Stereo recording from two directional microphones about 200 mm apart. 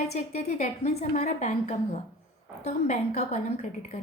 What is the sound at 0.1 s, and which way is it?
A woman's voice, 35° left (ahead or behind).